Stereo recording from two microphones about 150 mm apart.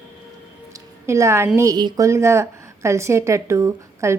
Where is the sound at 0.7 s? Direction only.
20° right (ahead or behind).